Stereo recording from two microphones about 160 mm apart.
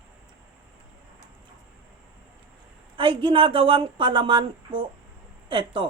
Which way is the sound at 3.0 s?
30° right (ahead or behind).